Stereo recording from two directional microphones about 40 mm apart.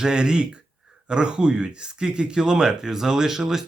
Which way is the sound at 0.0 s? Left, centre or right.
Centre.